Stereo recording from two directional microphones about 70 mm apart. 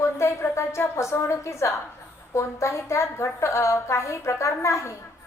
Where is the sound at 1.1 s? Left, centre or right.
Left.